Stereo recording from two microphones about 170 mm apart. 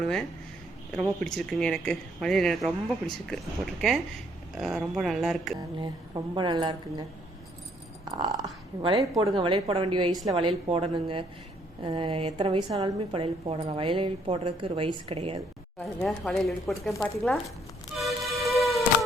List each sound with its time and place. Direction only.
0.0 s speech: 5° left (ahead or behind)
5.5 s speech: 25° right (ahead or behind)
8.1 s a woman's voice: 25° right (ahead or behind)
16.0 s speech: centre (ahead or behind)
17.9 s music: centre (ahead or behind)